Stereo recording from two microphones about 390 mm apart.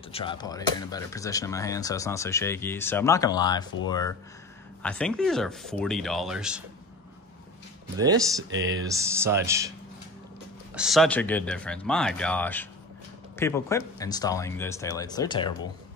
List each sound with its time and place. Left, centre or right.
0.1 s speech: centre
8.0 s speech: centre
8.5 s speech: right
8.8 s speech: centre
10.7 s speech: centre